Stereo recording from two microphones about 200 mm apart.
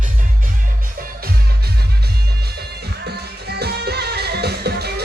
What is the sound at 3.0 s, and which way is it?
Music, 55° right (ahead or behind).